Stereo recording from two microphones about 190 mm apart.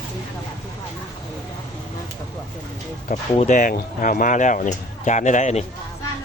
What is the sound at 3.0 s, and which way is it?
Speech, 35° left (ahead or behind).